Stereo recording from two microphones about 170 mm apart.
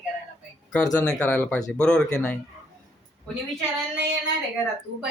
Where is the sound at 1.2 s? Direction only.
5° left (ahead or behind).